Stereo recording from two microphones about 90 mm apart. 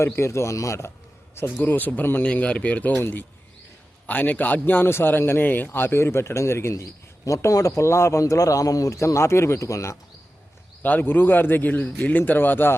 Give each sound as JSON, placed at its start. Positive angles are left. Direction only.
{"t": 0.0, "sound": "speech", "side_deg": 30}
{"t": 1.6, "sound": "a man's voice", "side_deg": 20}
{"t": 10.8, "sound": "a man's voice", "side_deg": 20}